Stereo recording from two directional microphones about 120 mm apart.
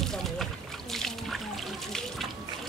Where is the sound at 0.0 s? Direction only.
Centre (ahead or behind).